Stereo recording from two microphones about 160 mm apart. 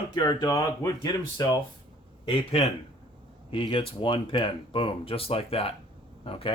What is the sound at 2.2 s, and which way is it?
Speech, 35° left (ahead or behind).